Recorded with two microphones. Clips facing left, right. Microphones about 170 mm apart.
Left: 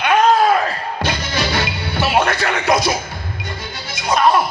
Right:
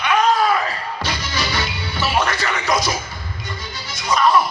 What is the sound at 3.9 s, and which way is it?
Music, 55° left (ahead or behind).